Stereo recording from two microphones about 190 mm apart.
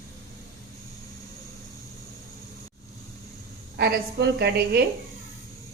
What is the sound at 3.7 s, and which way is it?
A woman's voice, 60° right (ahead or behind).